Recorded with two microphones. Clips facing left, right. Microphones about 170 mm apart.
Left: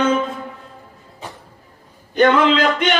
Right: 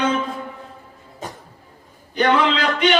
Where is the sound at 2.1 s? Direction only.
50° left (ahead or behind).